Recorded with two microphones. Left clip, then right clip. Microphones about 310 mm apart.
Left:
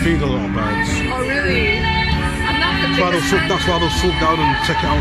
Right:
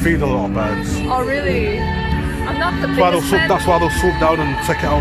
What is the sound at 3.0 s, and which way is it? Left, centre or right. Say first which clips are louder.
Speech: right 6 dB; right.